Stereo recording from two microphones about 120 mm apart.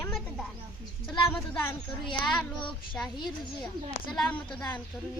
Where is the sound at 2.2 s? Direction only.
5° left (ahead or behind).